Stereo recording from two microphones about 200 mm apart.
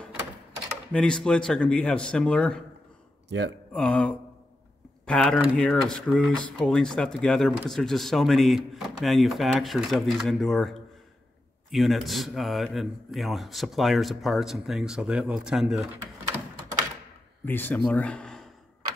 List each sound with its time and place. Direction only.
0.9 s speech: 5° left (ahead or behind)
3.3 s speech: 60° right (ahead or behind)
3.7 s speech: 5° left (ahead or behind)
17.5 s speech: 10° left (ahead or behind)